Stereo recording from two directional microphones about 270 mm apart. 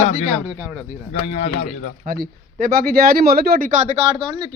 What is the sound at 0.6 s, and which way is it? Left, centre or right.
Speech, centre.